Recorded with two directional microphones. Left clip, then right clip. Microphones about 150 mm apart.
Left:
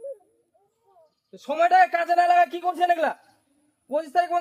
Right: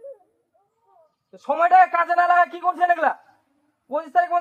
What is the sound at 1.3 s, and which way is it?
A man's voice, 45° left (ahead or behind).